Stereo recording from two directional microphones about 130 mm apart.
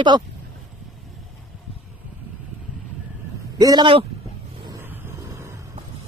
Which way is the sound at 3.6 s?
30° right (ahead or behind).